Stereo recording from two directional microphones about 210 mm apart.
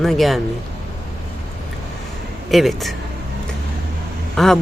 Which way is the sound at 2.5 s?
Centre (ahead or behind).